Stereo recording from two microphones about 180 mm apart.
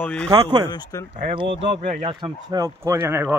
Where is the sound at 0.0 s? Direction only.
5° left (ahead or behind).